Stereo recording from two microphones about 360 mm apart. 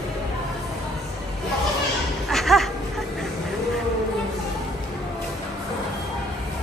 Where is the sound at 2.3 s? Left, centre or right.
Centre.